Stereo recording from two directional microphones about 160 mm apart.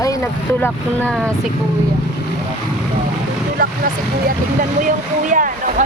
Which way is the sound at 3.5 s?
65° right (ahead or behind).